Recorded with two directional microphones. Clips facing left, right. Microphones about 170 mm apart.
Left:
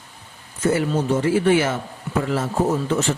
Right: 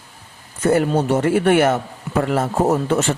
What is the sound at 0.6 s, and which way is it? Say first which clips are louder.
Speech: right 3 dB; 55° right (ahead or behind).